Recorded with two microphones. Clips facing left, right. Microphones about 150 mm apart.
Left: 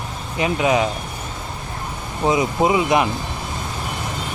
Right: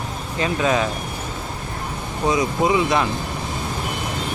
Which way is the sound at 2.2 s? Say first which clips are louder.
Left 2 dB; 20° left (ahead or behind).